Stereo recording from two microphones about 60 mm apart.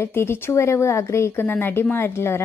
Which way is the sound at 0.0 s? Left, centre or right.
Left.